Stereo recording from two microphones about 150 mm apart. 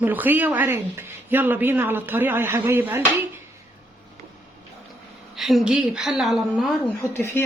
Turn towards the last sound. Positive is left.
turn(degrees=15)  # may be behind; listen again after turning